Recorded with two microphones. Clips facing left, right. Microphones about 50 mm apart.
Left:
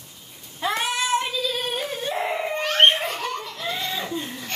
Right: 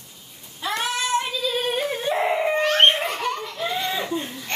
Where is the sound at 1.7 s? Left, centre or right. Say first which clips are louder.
Right 4 dB; centre.